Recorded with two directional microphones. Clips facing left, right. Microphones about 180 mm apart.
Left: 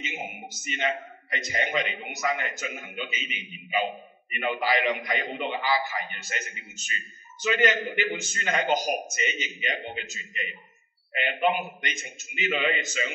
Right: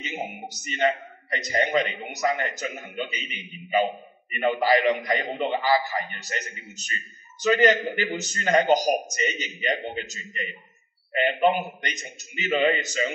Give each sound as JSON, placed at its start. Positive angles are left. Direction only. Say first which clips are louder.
{"t": 0.0, "sound": "a man's voice", "louder": "right 4 dB", "side_deg": -40}
{"t": 11.8, "sound": "a man's voice", "louder": "right 1 dB", "side_deg": -40}